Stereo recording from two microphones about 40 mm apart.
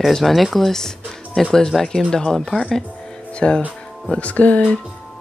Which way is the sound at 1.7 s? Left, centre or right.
Centre.